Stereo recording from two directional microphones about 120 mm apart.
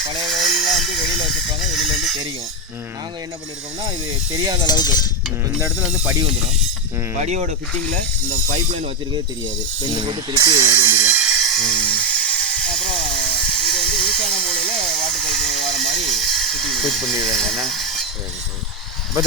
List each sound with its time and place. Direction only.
0.3 s a sound: centre (ahead or behind)
3.8 s speech: 30° right (ahead or behind)
4.6 s speech: 35° left (ahead or behind)
5.5 s stir: 25° right (ahead or behind)
7.3 s speech: 70° right (ahead or behind)
9.8 s a sound: 35° right (ahead or behind); by 13.0 s 5° left (ahead or behind)
13.5 s hiss: 5° left (ahead or behind)
17.2 s speech: 5° left (ahead or behind)
17.7 s a sound: centre (ahead or behind)